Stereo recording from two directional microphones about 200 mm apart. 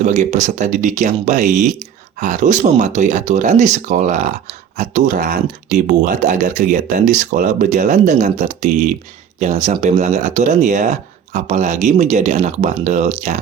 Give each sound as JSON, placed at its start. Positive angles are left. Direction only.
{"t": 0.0, "sound": "speech", "side_deg": -35}